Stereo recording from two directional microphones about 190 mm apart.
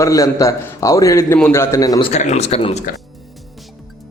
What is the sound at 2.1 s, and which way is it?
Speech, 35° left (ahead or behind).